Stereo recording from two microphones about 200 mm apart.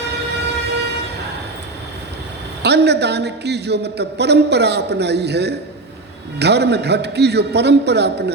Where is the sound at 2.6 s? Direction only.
55° right (ahead or behind).